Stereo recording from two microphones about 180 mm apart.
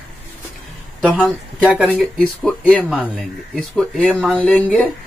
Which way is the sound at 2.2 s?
5° left (ahead or behind).